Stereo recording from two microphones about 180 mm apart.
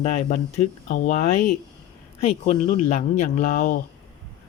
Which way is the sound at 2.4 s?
35° left (ahead or behind).